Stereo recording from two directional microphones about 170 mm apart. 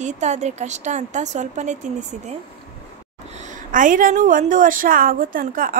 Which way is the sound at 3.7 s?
50° right (ahead or behind).